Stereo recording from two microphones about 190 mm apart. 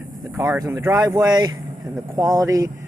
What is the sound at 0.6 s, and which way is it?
Speech, 20° right (ahead or behind).